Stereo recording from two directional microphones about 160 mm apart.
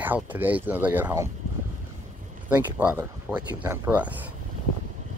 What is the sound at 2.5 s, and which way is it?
Speech, 10° right (ahead or behind).